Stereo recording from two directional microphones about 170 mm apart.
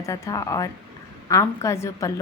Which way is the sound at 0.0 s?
20° left (ahead or behind).